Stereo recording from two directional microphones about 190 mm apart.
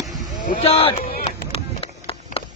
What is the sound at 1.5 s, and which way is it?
Run, 30° left (ahead or behind).